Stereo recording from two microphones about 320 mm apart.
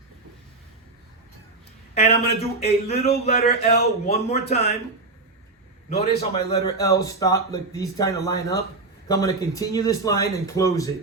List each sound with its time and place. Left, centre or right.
2.0 s speech: centre
6.1 s speech: centre